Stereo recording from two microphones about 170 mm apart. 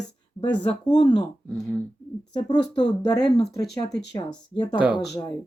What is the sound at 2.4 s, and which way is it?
Speech, 25° left (ahead or behind).